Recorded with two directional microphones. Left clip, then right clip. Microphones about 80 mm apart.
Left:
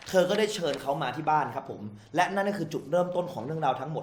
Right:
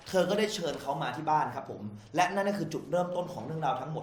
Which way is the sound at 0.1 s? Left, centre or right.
Left.